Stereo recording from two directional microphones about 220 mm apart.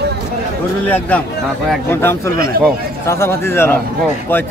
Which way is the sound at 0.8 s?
5° left (ahead or behind).